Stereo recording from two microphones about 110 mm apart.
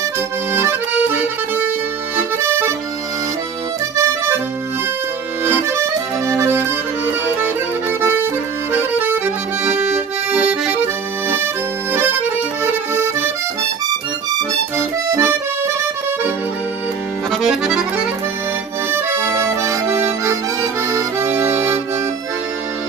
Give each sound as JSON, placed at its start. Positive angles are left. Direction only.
{"t": 0.5, "sound": "accordion", "side_deg": -20}
{"t": 2.1, "sound": "music", "side_deg": -20}
{"t": 3.9, "sound": "accordion", "side_deg": -25}
{"t": 5.5, "sound": "accordion", "side_deg": -25}
{"t": 12.6, "sound": "accordion", "side_deg": -20}
{"t": 14.8, "sound": "accordion", "side_deg": -20}
{"t": 17.3, "sound": "accordion", "side_deg": -5}
{"t": 18.9, "sound": "accordion", "side_deg": -20}